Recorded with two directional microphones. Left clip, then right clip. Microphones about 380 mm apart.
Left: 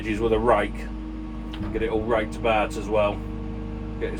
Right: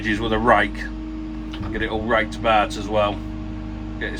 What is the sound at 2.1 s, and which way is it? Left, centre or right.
Speech, right.